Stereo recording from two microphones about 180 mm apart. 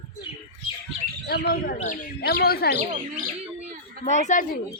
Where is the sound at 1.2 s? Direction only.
60° left (ahead or behind).